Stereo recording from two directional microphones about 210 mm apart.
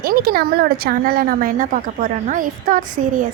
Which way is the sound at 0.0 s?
45° right (ahead or behind).